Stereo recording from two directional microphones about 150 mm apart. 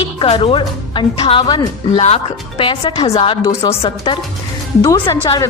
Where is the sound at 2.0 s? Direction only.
40° left (ahead or behind).